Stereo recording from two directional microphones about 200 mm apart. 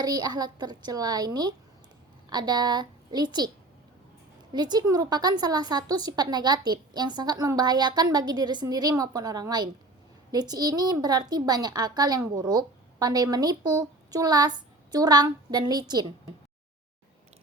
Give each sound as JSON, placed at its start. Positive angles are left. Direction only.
{"t": 0.0, "sound": "a woman's voice", "side_deg": -20}
{"t": 4.5, "sound": "a woman's voice", "side_deg": -20}